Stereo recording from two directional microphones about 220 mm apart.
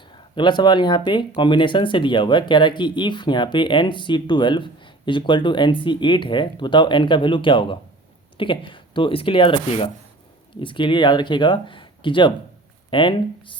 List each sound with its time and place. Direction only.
0.3 s speech: 20° left (ahead or behind)